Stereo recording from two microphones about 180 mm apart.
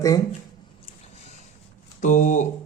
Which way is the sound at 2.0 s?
45° left (ahead or behind).